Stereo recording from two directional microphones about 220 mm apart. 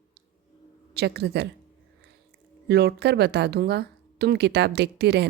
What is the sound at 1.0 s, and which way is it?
Speech, 50° right (ahead or behind).